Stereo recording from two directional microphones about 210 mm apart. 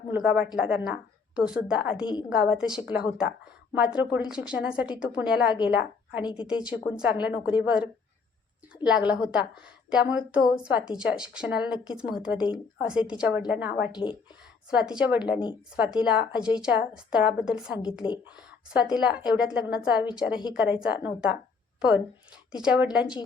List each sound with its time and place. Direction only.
0.1 s a woman's voice: 5° right (ahead or behind)
6.2 s speech: 20° left (ahead or behind)
6.5 s a woman's voice: 5° right (ahead or behind)
13.9 s speech: 20° left (ahead or behind)
14.7 s a woman's voice: 5° right (ahead or behind)
18.0 s speech: 20° left (ahead or behind)
18.7 s a woman's voice: 5° right (ahead or behind)